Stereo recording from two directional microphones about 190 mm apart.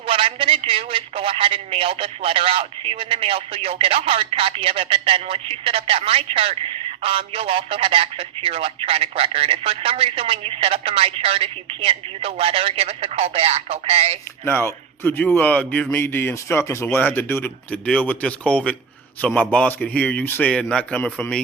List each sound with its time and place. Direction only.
0.0 s a man's voice: 30° right (ahead or behind)
14.4 s speech: 10° left (ahead or behind)